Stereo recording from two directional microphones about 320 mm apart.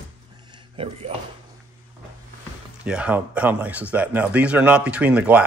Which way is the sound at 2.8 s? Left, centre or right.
Centre.